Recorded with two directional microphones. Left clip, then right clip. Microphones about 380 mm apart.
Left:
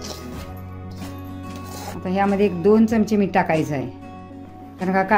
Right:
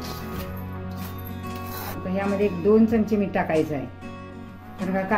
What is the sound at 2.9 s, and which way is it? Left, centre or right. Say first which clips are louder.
Speech: left 3 dB; left.